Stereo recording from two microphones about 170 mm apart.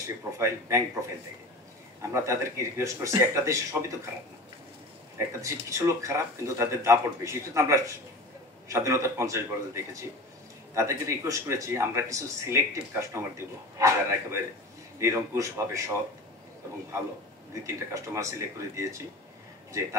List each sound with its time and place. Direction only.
0.0 s speech: 15° right (ahead or behind)
5.4 s speech: 15° right (ahead or behind)
10.7 s speech: 15° right (ahead or behind)
17.6 s speech: 15° right (ahead or behind)